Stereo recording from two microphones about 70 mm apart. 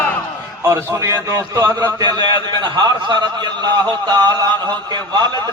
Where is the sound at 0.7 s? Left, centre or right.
Right.